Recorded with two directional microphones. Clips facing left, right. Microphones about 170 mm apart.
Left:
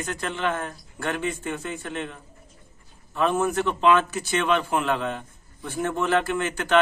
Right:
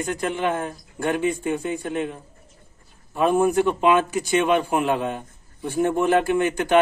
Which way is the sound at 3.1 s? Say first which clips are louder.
Right 4 dB; 15° right (ahead or behind).